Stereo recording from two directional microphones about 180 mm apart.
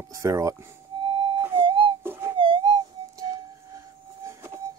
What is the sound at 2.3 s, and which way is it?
Music, 30° right (ahead or behind).